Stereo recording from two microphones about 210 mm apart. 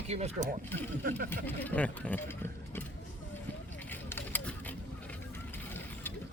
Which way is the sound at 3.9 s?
10° left (ahead or behind).